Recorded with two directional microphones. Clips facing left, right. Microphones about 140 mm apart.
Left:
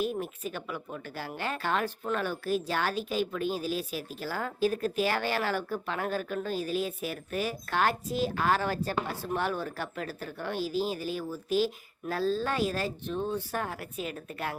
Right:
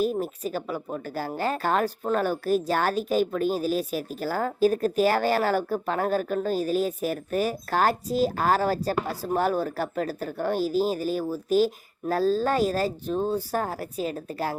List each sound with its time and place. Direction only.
0.0 s a woman's voice: 40° right (ahead or behind)